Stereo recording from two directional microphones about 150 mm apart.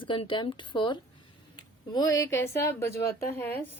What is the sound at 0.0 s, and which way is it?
A woman's voice, 35° left (ahead or behind).